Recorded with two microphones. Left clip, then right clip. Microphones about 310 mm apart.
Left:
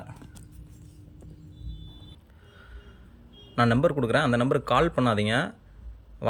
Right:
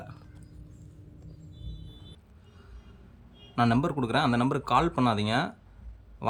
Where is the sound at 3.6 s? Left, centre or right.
Centre.